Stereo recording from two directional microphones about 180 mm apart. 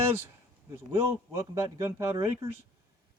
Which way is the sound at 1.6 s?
20° right (ahead or behind).